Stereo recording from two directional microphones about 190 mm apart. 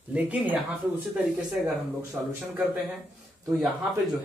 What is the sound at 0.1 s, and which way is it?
Speech, 10° right (ahead or behind).